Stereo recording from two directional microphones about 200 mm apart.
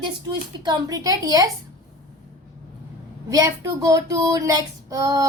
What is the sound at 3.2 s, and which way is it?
Child singing, 15° right (ahead or behind).